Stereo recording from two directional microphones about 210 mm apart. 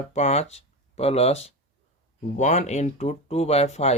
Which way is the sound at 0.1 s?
30° left (ahead or behind).